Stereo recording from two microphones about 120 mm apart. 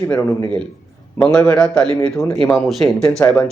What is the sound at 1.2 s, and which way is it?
Speech, 5° left (ahead or behind).